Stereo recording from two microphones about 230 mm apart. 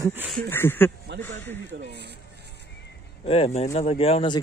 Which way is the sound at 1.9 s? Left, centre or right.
Right.